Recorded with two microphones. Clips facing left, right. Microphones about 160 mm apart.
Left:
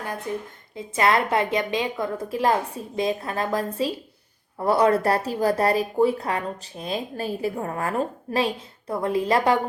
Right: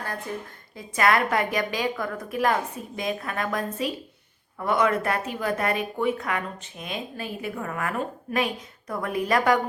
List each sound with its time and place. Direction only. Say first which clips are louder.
0.3 s a woman's voice: left 4 dB; 20° left (ahead or behind)